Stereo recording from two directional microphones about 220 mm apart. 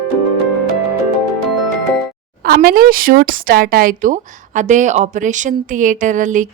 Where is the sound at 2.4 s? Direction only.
40° right (ahead or behind).